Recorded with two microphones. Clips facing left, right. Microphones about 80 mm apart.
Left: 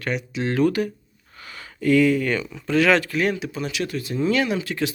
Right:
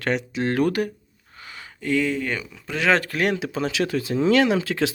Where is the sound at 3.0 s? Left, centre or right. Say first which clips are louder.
Left 1 dB; right.